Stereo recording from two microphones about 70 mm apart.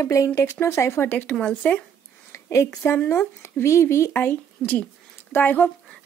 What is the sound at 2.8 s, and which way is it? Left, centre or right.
Speech, left.